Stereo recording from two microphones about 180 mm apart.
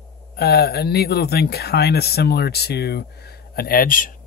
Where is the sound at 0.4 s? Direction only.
60° left (ahead or behind).